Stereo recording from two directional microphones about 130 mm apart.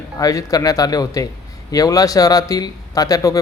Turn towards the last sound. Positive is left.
turn(degrees=25)  # may be behind; listen again after turning